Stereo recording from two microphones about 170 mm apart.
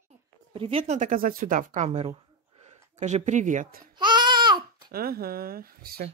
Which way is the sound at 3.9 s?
25° right (ahead or behind).